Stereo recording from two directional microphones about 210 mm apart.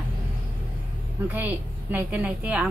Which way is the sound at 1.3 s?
10° right (ahead or behind).